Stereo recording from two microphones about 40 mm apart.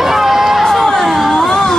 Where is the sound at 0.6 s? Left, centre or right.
Centre.